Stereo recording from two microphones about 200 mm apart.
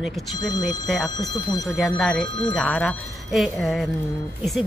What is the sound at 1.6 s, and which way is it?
Speech, centre (ahead or behind).